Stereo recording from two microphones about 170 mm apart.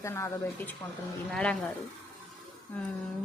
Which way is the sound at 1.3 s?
5° left (ahead or behind).